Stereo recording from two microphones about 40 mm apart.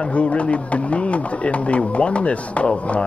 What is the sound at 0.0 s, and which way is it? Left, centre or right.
Speech, left.